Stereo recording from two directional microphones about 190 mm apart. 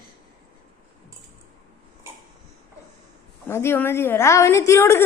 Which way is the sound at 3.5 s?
15° left (ahead or behind).